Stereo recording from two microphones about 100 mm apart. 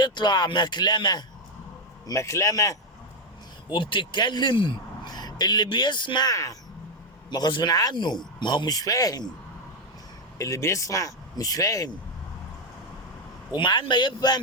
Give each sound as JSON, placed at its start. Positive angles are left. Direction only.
{"t": 0.0, "sound": "a man's voice", "side_deg": 45}
{"t": 2.0, "sound": "speech", "side_deg": 30}
{"t": 3.7, "sound": "a man's voice", "side_deg": 55}
{"t": 6.3, "sound": "speech", "side_deg": 35}
{"t": 7.3, "sound": "a man's voice", "side_deg": 45}
{"t": 10.3, "sound": "speech", "side_deg": 30}
{"t": 13.5, "sound": "a man's voice", "side_deg": 50}